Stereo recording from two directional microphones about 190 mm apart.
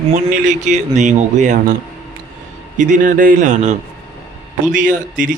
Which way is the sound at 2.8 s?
45° right (ahead or behind).